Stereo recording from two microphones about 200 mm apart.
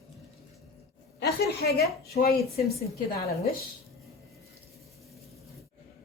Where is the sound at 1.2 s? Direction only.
50° left (ahead or behind).